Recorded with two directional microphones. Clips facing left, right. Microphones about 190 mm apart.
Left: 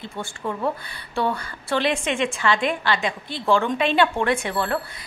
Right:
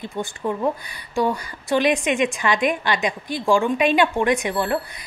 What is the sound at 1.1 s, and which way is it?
A woman's voice, 15° right (ahead or behind).